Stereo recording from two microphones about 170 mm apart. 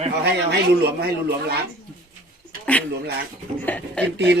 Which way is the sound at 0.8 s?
70° right (ahead or behind).